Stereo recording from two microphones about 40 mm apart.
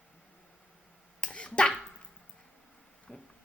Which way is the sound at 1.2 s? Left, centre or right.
Left.